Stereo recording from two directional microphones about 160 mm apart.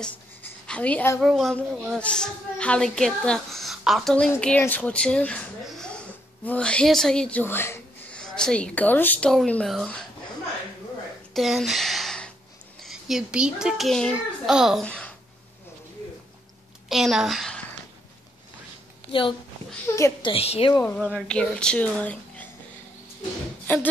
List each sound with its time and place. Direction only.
0.0 s writing: 10° left (ahead or behind)
1.2 s a woman's voice: centre (ahead or behind)
11.3 s a sound: centre (ahead or behind)
12.8 s a child's voice: 5° right (ahead or behind)
16.9 s a woman's voice: centre (ahead or behind)
20.2 s a woman's voice: 35° left (ahead or behind)
20.7 s speech: 10° left (ahead or behind)
23.7 s speech: 10° left (ahead or behind)